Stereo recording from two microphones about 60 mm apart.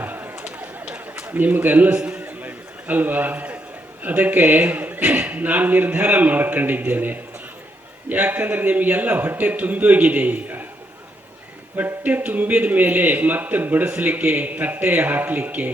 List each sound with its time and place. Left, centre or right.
0.0 s a sound: right
0.4 s bird: centre
1.3 s a man's voice: right
2.2 s a sound: right
4.0 s a man's voice: right
11.8 s a man's voice: right